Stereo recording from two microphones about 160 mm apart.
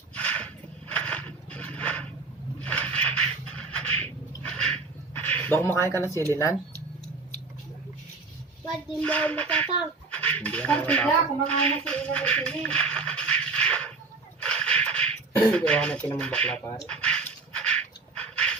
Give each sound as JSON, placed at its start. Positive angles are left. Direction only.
{"t": 0.1, "sound": "a sound", "side_deg": 10}
{"t": 6.0, "sound": "speech", "side_deg": 15}
{"t": 9.0, "sound": "speech", "side_deg": 10}
{"t": 14.4, "sound": "snort", "side_deg": 5}
{"t": 15.5, "sound": "speech", "side_deg": 5}
{"t": 16.9, "sound": "a sound", "side_deg": 5}